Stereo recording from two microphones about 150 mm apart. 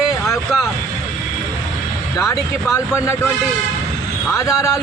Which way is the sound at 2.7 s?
20° left (ahead or behind).